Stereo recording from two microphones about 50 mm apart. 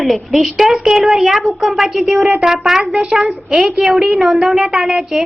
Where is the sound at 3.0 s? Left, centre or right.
Centre.